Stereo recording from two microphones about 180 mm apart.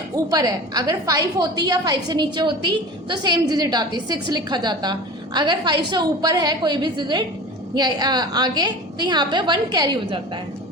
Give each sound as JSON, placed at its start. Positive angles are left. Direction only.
{"t": 0.3, "sound": "a woman's voice", "side_deg": -20}